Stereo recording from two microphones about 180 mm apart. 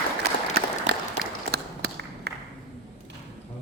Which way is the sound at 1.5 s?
65° right (ahead or behind).